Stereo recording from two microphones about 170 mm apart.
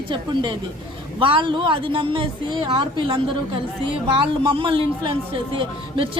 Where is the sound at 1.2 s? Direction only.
30° right (ahead or behind).